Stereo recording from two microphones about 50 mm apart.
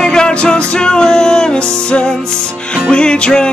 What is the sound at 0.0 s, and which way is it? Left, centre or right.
Music, centre.